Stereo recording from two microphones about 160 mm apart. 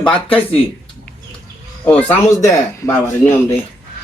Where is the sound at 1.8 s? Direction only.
10° left (ahead or behind).